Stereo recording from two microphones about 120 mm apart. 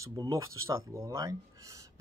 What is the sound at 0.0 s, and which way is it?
Speech, 30° right (ahead or behind).